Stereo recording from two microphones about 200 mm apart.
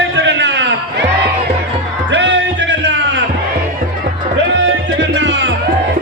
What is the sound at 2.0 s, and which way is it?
Music, 60° right (ahead or behind).